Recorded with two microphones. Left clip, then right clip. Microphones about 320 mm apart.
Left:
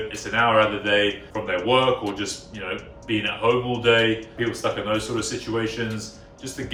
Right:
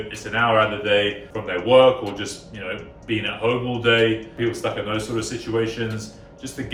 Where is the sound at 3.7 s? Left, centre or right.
Centre.